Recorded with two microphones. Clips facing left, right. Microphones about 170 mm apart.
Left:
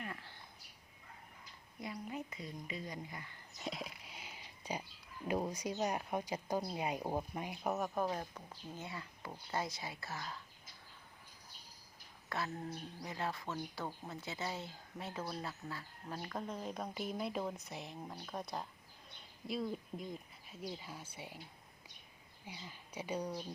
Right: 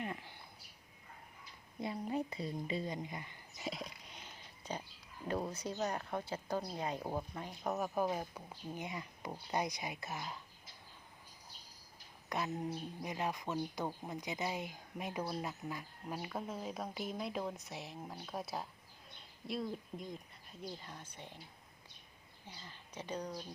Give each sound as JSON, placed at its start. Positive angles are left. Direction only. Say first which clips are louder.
{"t": 0.0, "sound": "a sound", "louder": "right 4 dB", "side_deg": -15}
{"t": 1.8, "sound": "speech", "louder": "right 6 dB", "side_deg": -30}
{"t": 3.6, "sound": "a sound", "louder": "even", "side_deg": 0}
{"t": 5.3, "sound": "speech", "louder": "left 1 dB", "side_deg": 10}
{"t": 7.9, "sound": "speech", "louder": "right 2 dB", "side_deg": -10}
{"t": 12.3, "sound": "speech", "louder": "right 3 dB", "side_deg": -15}
{"t": 22.4, "sound": "speech", "louder": "left 3 dB", "side_deg": 10}